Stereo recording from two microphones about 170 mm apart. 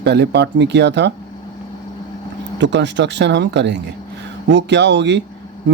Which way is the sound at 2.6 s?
90° right.